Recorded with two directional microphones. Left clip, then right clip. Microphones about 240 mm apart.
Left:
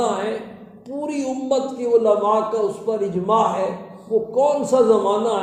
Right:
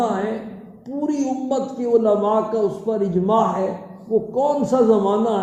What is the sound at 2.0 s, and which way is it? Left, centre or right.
A man's voice, centre.